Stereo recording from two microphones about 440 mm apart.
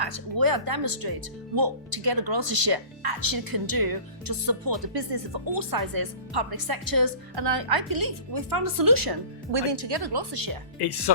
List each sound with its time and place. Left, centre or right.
0.0 s speech: right
5.5 s speech: right
9.5 s speech: right
10.8 s speech: left